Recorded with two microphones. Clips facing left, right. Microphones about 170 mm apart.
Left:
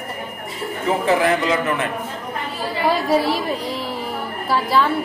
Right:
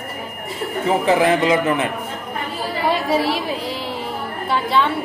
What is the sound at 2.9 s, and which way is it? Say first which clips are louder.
A woman's voice: left 1 dB; centre (ahead or behind).